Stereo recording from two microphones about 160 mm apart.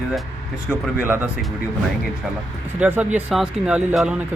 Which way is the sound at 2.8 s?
10° right (ahead or behind).